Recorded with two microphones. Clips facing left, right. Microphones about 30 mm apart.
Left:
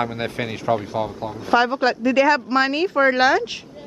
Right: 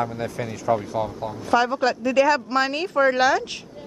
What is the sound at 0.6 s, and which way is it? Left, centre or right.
A woman's voice, left.